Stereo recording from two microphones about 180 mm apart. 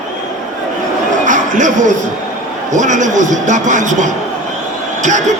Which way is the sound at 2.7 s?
45° right (ahead or behind).